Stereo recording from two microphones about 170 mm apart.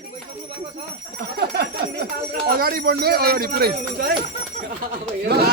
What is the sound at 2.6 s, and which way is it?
Speech, 60° right (ahead or behind).